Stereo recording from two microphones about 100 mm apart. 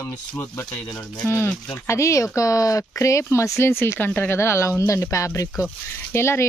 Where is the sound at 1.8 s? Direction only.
30° left (ahead or behind).